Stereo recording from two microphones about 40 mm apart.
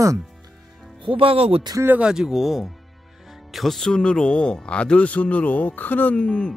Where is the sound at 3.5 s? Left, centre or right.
Centre.